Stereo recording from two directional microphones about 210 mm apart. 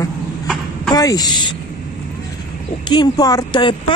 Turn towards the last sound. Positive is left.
turn(degrees=20)  # may be behind; listen again after turning